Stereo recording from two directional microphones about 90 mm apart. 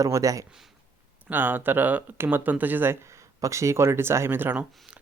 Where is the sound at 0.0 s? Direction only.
40° right (ahead or behind).